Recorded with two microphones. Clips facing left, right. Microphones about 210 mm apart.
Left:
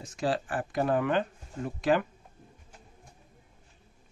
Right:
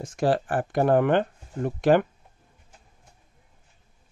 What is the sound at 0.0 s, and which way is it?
Speech, 50° right (ahead or behind).